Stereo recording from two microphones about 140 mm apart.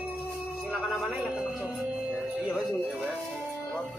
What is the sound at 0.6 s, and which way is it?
Speech, 5° right (ahead or behind).